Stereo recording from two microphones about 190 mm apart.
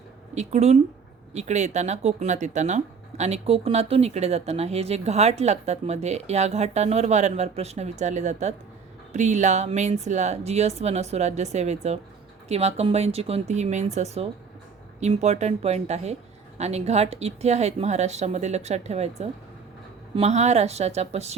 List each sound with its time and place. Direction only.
0.3 s speech: 35° right (ahead or behind)